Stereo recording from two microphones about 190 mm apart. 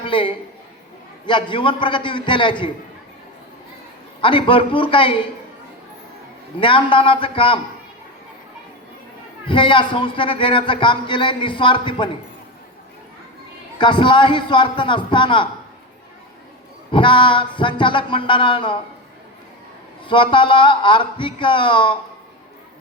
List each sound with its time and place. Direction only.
0.0 s a man's voice: 25° left (ahead or behind)
4.2 s a man's voice: 25° left (ahead or behind)
6.6 s a man's voice: 25° left (ahead or behind)
9.5 s a man's voice: 25° left (ahead or behind)
13.7 s a man's voice: 25° left (ahead or behind)
16.9 s a man's voice: 25° left (ahead or behind)
20.1 s a man's voice: 25° left (ahead or behind)